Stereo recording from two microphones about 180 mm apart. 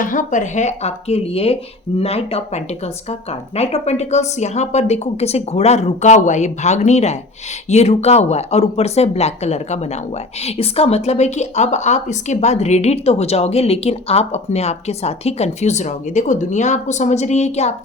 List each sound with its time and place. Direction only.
0.0 s a woman's voice: 45° left (ahead or behind)